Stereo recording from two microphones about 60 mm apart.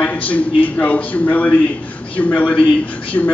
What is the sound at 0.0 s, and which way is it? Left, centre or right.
Speech, left.